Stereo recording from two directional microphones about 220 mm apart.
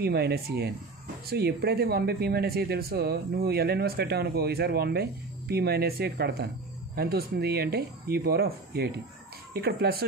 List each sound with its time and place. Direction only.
0.0 s speech: 45° right (ahead or behind)